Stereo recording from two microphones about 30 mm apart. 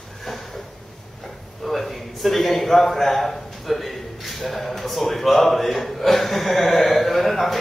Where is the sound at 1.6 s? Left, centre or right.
Centre.